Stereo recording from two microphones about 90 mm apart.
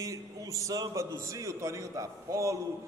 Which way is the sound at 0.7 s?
40° right (ahead or behind).